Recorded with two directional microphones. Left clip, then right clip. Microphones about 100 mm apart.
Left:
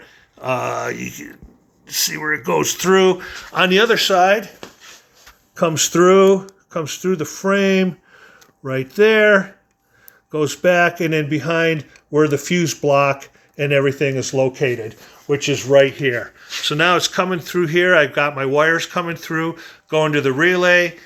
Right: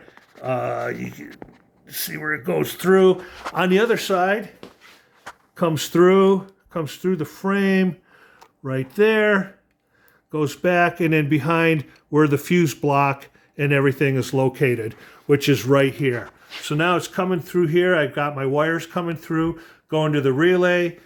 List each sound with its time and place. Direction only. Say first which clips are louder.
0.0 s speech: left 3 dB; 10° right (ahead or behind); by 3.0 s 25° right (ahead or behind)
3.0 s speech: left 1 dB; 40° right (ahead or behind)
3.8 s speech: left 5 dB; 20° right (ahead or behind)
4.3 s speech: left 6 dB; 20° left (ahead or behind)
5.5 s speech: left 3 dB; 15° right (ahead or behind)
11.1 s speech: left 1 dB; 55° right (ahead or behind); by 16.0 s 90° right
16.0 s speech: left 4 dB; 55° right (ahead or behind)
17.1 s speech: left 4 dB; 40° right (ahead or behind); by 20.3 s 70° right (ahead or behind)
20.4 s speech: left 4 dB; 85° right